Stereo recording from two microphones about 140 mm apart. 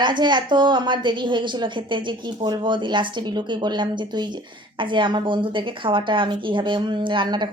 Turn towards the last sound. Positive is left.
turn(degrees=-30)  # may be behind; listen again after turning